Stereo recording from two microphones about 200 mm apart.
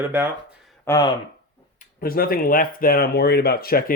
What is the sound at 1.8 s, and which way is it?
Speech, 45° left (ahead or behind).